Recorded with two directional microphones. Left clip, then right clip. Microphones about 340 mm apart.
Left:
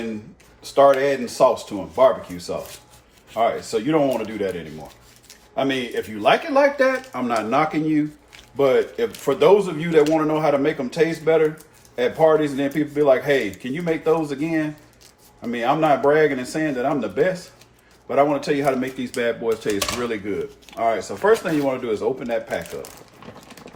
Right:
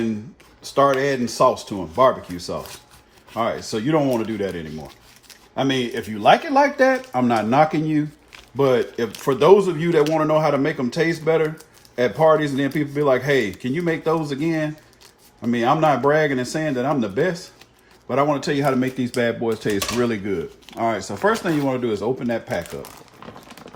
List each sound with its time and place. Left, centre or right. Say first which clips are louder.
0.6 s speech: left 3 dB; right
3.3 s speech: left 3 dB; right